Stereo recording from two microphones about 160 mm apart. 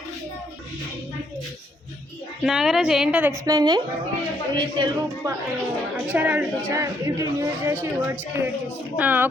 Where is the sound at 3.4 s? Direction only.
25° right (ahead or behind).